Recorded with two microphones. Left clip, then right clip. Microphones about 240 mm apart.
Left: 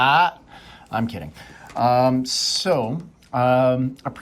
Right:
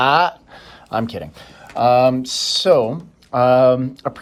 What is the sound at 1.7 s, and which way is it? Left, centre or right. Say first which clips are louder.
Speech: right 4 dB; right.